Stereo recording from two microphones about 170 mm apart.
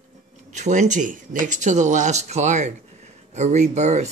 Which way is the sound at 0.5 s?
45° right (ahead or behind).